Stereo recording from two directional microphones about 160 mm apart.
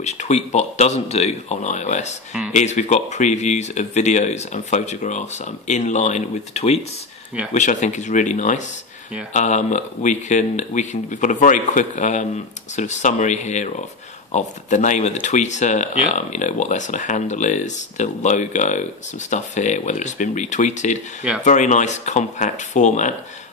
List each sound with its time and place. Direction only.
0.0 s speech: 45° left (ahead or behind)